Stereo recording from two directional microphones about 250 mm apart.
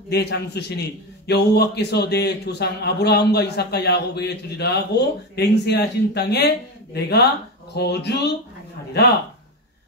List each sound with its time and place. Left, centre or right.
0.1 s a man's voice: left